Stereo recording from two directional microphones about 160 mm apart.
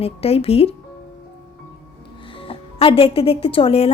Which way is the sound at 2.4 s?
35° left (ahead or behind).